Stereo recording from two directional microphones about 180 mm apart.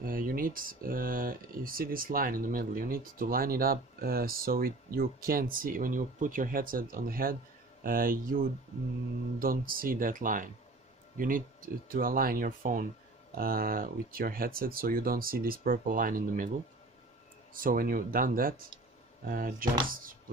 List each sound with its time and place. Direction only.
0.0 s speech: 55° right (ahead or behind)
17.6 s speech: 50° right (ahead or behind)